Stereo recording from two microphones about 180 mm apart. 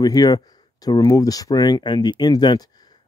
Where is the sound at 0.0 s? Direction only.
20° left (ahead or behind).